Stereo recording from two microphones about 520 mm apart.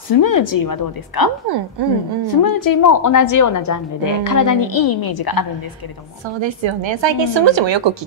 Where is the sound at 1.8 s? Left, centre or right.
Right.